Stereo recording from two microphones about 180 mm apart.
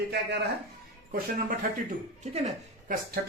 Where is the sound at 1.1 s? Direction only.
50° right (ahead or behind).